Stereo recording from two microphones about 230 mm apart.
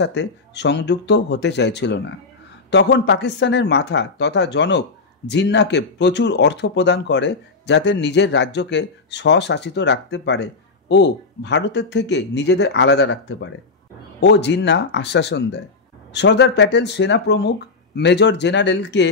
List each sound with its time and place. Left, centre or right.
0.0 s speech: left